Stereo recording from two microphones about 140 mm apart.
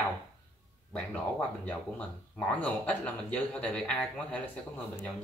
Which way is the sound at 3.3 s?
10° left (ahead or behind).